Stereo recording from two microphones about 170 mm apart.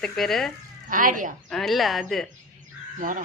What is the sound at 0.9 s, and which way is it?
Speech, 50° right (ahead or behind).